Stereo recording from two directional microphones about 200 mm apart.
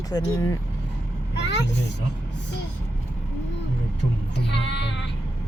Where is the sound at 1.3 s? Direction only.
60° left (ahead or behind).